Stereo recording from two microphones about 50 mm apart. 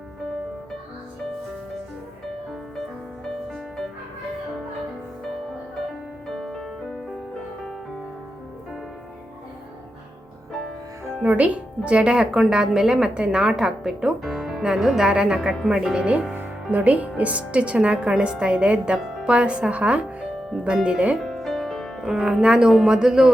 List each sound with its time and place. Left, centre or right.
3.5 s music: centre
6.2 s music: centre
11.2 s a woman's voice: right
16.7 s a woman's voice: right
21.2 s music: centre
22.0 s a woman's voice: centre